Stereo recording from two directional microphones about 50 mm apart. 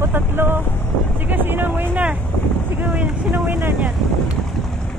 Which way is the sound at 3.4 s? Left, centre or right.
Right.